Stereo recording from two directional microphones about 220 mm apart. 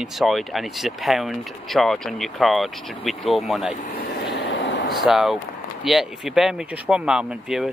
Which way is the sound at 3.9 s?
45° left (ahead or behind).